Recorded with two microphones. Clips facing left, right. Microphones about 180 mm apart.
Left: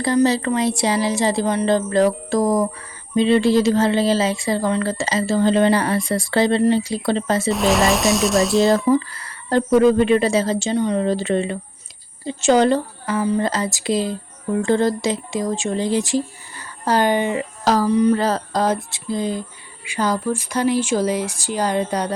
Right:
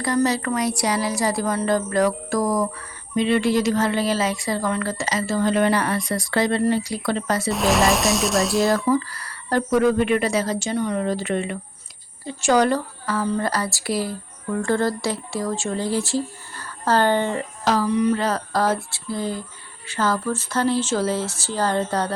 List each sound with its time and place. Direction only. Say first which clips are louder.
0.0 s speech: left 4 dB; 25° left (ahead or behind)
7.5 s speech: left 1 dB; centre (ahead or behind)
8.6 s speech: left 4 dB; 20° left (ahead or behind)
17.7 s a sound: left 4 dB; 35° left (ahead or behind)
18.5 s speech: left 2 dB; 20° left (ahead or behind)